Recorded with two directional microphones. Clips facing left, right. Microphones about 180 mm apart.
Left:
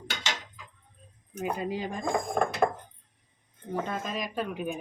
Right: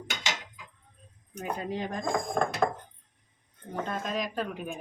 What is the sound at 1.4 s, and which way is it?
Speech, 5° left (ahead or behind).